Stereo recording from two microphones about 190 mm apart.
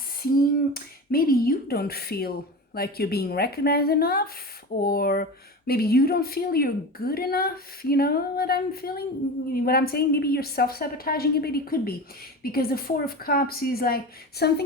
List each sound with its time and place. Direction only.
0.2 s speech: 50° left (ahead or behind)